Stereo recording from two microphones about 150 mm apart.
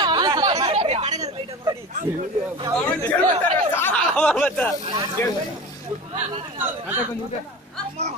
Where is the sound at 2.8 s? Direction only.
10° left (ahead or behind).